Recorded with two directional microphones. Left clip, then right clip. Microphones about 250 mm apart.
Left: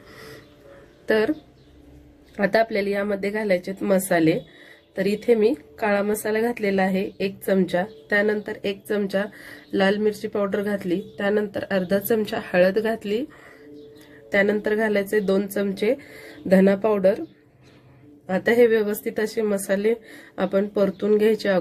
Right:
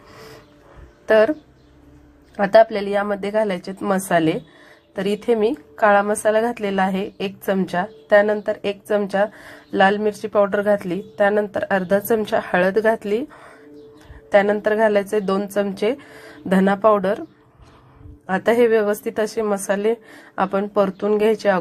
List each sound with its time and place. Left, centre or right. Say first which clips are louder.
0.1 s a sound: right 1 dB; centre
1.0 s speech: right 7 dB; centre
2.5 s speech: right 9 dB; centre
2.7 s speech: right 2 dB; right
3.3 s a woman's voice: right 4 dB; centre
14.3 s a woman's voice: right 5 dB; centre
16.6 s speech: even; right
18.3 s a woman's voice: right 2 dB; centre